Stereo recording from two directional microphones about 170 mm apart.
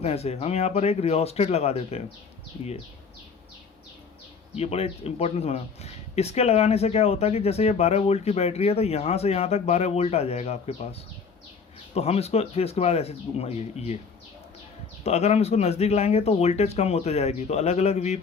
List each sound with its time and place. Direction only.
0.0 s speech: 35° left (ahead or behind)
4.5 s speech: 35° left (ahead or behind)
11.9 s speech: 40° left (ahead or behind)
15.0 s speech: 40° left (ahead or behind)